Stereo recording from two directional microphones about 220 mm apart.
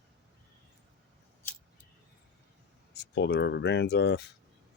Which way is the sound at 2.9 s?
50° left (ahead or behind).